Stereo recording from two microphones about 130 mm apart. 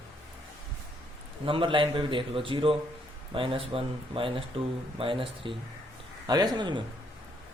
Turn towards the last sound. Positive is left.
turn(degrees=-35)  # may be behind; listen again after turning